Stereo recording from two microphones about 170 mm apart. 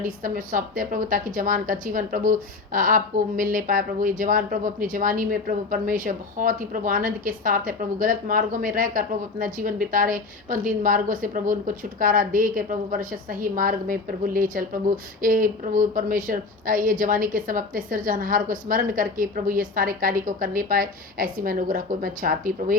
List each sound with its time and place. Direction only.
0.0 s a woman's voice: 55° right (ahead or behind)